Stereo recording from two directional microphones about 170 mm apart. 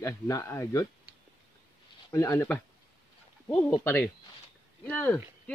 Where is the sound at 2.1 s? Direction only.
15° left (ahead or behind).